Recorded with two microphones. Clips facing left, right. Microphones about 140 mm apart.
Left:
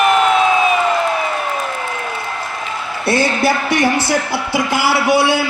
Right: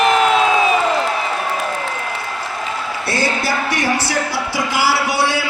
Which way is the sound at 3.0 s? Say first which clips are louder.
Left 6 dB; 55° left (ahead or behind).